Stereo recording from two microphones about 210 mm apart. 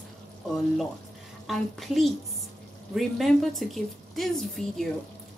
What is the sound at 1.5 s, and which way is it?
A woman's voice, centre (ahead or behind).